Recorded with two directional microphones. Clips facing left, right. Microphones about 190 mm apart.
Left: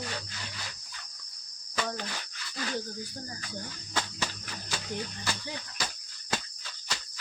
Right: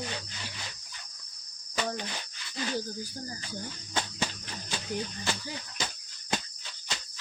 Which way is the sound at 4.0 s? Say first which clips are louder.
Right 1 dB; 20° right (ahead or behind).